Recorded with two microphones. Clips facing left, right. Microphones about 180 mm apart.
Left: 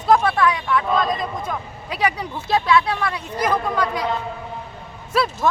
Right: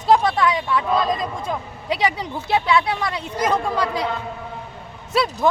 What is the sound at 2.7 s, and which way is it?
Speech, 20° right (ahead or behind).